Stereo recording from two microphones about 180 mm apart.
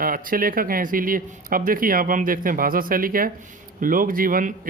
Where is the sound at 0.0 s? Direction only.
50° right (ahead or behind).